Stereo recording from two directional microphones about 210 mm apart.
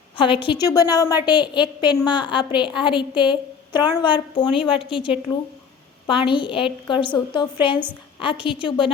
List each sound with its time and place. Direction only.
0.2 s a woman's voice: 25° left (ahead or behind)